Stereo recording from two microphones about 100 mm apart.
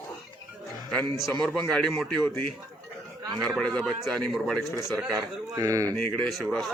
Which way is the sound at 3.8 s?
5° left (ahead or behind).